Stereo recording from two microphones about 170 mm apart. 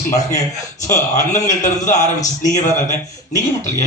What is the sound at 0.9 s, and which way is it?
Speech, 20° left (ahead or behind).